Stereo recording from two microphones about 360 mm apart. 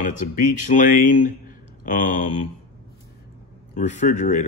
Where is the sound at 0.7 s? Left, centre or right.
Left.